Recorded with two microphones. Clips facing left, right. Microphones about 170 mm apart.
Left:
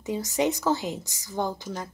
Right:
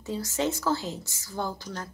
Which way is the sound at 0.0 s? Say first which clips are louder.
Left 3 dB; 20° left (ahead or behind).